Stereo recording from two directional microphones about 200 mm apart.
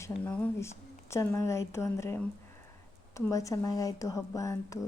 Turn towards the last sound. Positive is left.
turn(degrees=15)  # may be behind; listen again after turning